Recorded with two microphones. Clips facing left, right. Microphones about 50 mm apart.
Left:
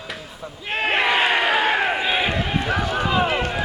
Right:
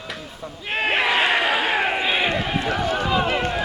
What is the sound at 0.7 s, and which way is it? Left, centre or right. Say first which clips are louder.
Speech: left 1 dB; centre.